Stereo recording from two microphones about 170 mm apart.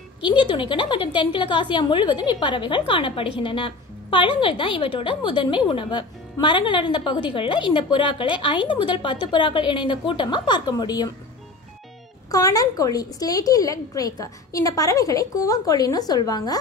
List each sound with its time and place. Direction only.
0.2 s a woman's voice: 25° left (ahead or behind)
12.3 s a woman's voice: 20° left (ahead or behind)